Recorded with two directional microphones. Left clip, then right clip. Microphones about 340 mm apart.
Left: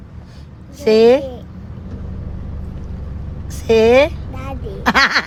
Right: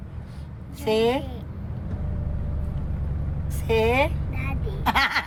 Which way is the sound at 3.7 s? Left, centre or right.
Left.